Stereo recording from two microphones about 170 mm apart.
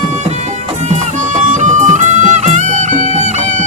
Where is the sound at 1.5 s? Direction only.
45° right (ahead or behind).